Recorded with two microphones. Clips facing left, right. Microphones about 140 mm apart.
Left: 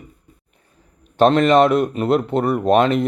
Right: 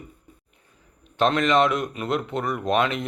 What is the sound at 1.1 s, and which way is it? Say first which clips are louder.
A man's voice: left 7 dB; 35° left (ahead or behind).